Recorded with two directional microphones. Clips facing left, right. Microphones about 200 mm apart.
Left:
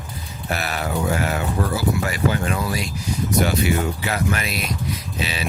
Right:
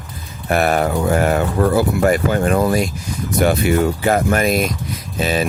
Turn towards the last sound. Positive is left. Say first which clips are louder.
# right 8 dB
turn(degrees=-50)  # may be behind; listen again after turning